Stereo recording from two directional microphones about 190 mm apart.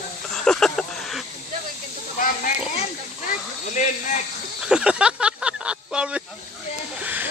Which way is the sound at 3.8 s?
40° left (ahead or behind).